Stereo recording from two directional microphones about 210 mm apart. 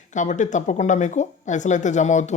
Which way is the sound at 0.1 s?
35° left (ahead or behind).